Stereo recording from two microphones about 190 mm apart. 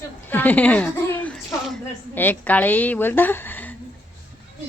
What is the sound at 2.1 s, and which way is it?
A woman's voice, 10° left (ahead or behind).